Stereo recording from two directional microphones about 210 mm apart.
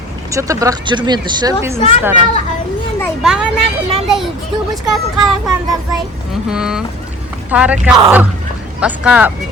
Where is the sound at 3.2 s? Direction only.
5° right (ahead or behind).